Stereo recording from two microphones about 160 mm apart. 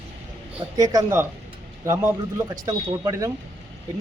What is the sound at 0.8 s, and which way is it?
Speech, 20° right (ahead or behind).